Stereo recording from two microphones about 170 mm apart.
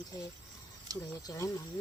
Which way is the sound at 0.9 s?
20° right (ahead or behind).